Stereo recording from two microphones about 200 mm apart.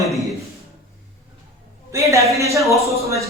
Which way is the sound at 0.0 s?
Centre (ahead or behind).